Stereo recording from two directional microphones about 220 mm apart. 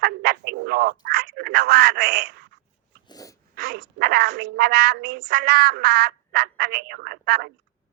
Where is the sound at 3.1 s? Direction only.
15° left (ahead or behind).